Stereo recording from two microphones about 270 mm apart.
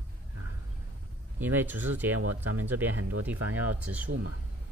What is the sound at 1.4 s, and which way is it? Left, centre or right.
Speech, centre.